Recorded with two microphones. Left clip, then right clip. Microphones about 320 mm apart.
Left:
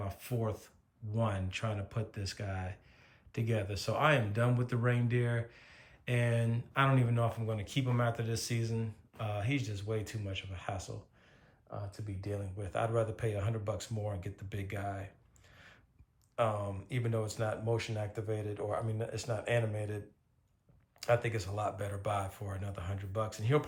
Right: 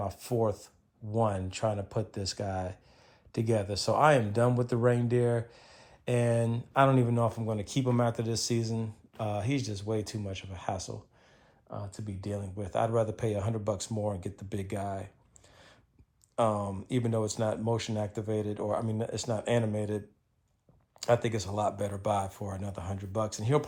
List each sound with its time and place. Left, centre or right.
0.0 s speech: centre
15.5 s a sound: centre
16.3 s speech: centre
21.0 s speech: centre